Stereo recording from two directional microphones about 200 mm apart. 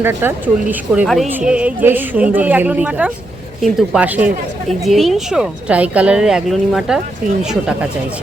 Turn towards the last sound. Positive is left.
turn(degrees=-5)  # may be behind; listen again after turning